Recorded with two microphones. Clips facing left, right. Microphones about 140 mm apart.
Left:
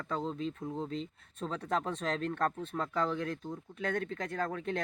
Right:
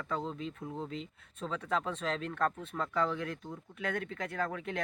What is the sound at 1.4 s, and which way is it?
Speech, 40° left (ahead or behind).